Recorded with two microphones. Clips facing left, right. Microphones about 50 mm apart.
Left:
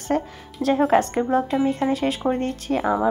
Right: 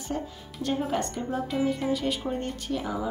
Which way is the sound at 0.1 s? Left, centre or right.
Left.